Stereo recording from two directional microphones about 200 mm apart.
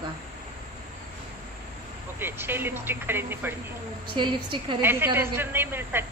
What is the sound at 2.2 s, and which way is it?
Speech, 10° right (ahead or behind).